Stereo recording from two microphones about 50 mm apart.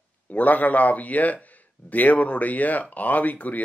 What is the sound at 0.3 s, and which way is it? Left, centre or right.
Speech, left.